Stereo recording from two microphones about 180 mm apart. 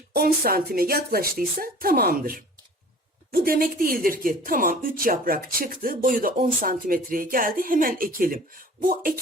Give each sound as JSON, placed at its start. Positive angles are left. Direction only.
{"t": 0.1, "sound": "speech", "side_deg": -55}